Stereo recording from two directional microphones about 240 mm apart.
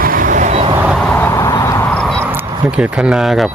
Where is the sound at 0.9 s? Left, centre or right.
Centre.